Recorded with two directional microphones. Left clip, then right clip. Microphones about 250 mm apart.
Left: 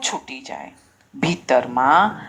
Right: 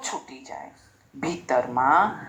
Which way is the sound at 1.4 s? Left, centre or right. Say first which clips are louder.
Left 5 dB; left.